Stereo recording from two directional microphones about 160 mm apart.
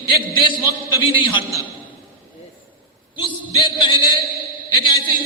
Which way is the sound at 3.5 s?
30° left (ahead or behind).